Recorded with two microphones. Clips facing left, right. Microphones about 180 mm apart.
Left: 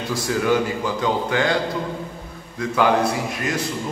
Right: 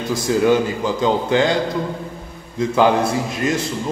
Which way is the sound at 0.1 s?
25° right (ahead or behind).